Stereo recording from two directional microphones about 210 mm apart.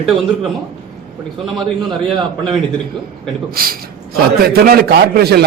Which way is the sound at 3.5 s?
45° right (ahead or behind).